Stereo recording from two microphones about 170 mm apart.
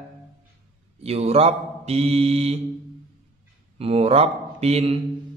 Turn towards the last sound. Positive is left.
turn(degrees=-35)  # may be behind; listen again after turning